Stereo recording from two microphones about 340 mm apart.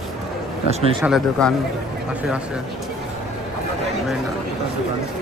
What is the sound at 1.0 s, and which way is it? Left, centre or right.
Speech, centre.